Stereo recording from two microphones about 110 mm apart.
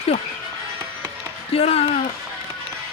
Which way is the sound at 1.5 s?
65° left (ahead or behind).